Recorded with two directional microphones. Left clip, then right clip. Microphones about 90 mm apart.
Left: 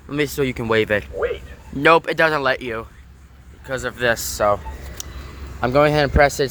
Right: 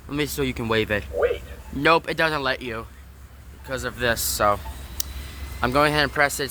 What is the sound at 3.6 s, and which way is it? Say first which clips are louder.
Speech: left 4 dB; 30° left (ahead or behind).